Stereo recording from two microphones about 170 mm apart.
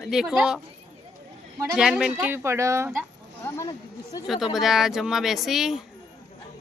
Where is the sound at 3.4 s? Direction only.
20° left (ahead or behind).